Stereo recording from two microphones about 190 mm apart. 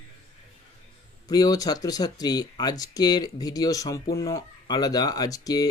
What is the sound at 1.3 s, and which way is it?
Speech, 20° left (ahead or behind).